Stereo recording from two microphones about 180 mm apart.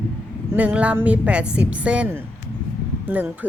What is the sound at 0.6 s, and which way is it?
Speech, 5° right (ahead or behind).